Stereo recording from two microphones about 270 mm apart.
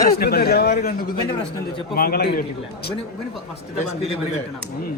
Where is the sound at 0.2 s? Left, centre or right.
Left.